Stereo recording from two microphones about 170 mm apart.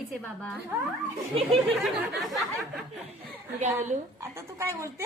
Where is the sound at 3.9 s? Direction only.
50° right (ahead or behind).